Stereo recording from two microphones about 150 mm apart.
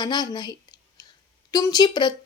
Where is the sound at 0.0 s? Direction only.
30° left (ahead or behind).